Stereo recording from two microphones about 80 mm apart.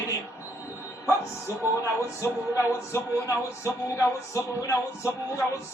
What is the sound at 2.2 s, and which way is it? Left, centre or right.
Speech, left.